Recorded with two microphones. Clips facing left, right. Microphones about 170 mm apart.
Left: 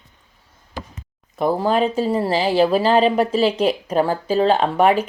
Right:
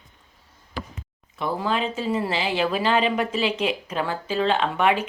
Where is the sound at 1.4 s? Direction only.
40° left (ahead or behind).